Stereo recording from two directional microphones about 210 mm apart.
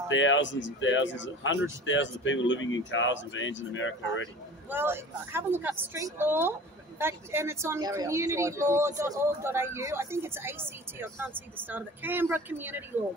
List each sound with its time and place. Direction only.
0.1 s speech: 65° left (ahead or behind)
4.6 s a woman's voice: 10° right (ahead or behind)